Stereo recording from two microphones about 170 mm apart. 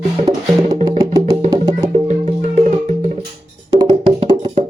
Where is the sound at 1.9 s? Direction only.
40° right (ahead or behind).